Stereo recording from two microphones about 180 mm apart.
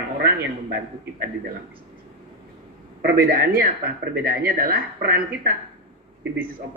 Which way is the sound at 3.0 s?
60° right (ahead or behind).